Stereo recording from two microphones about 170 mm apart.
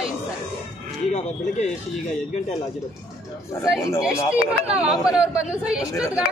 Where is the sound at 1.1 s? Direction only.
45° left (ahead or behind).